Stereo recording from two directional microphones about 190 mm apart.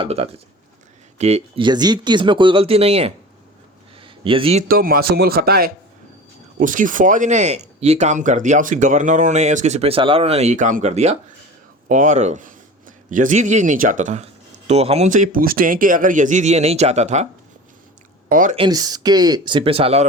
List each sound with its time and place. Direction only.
0.0 s speech: 30° right (ahead or behind)
4.0 s a sound: 25° right (ahead or behind)
4.7 s speech: 50° right (ahead or behind)
18.3 s speech: 45° right (ahead or behind)
18.5 s speech: 25° right (ahead or behind)